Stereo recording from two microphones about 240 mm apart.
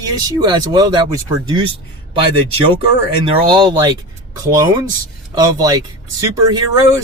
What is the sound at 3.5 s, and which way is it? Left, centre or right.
A man's voice, centre.